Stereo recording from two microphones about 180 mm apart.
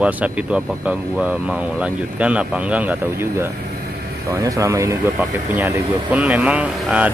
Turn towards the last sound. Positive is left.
turn(degrees=-5)  # may be behind; listen again after turning